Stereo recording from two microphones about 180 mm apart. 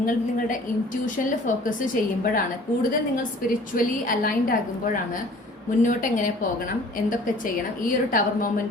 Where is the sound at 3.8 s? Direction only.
50° left (ahead or behind).